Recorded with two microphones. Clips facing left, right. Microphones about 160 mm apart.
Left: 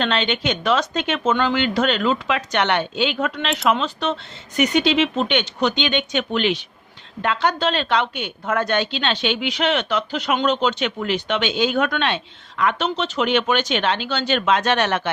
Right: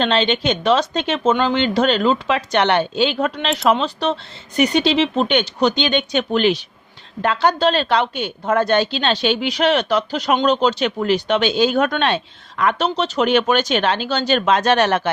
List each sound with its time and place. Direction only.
0.0 s a woman's voice: 30° right (ahead or behind)